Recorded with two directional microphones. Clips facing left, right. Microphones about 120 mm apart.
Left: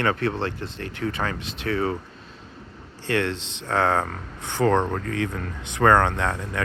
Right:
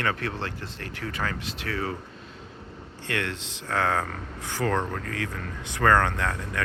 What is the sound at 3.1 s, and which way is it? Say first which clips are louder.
Speech: left 6 dB; 30° left (ahead or behind).